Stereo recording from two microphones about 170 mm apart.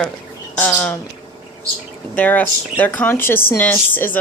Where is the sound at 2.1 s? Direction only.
10° left (ahead or behind).